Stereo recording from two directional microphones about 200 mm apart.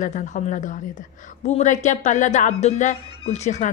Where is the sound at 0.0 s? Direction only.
40° left (ahead or behind).